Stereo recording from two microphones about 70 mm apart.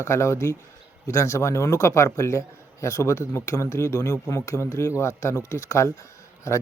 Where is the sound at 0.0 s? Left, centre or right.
Left.